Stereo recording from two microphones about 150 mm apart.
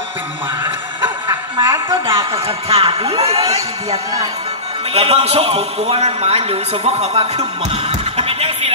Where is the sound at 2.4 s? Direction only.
40° right (ahead or behind).